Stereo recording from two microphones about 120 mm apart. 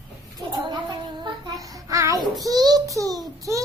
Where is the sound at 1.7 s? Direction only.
25° right (ahead or behind).